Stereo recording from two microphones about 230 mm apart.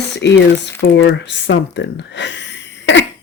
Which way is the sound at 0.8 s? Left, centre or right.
Left.